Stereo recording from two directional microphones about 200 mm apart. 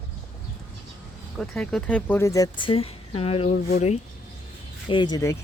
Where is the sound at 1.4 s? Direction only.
5° left (ahead or behind); by 4.0 s 35° left (ahead or behind).